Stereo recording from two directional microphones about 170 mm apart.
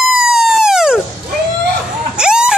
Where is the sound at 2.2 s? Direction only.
5° right (ahead or behind).